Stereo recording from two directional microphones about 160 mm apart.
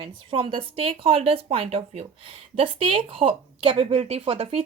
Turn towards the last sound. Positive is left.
turn(degrees=-40)  # may be behind; listen again after turning